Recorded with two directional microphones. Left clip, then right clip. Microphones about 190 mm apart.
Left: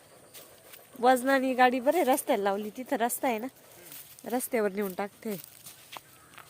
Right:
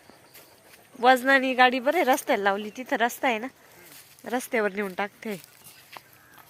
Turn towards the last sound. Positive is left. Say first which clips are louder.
# even
turn(degrees=0)  # may be behind; listen again after turning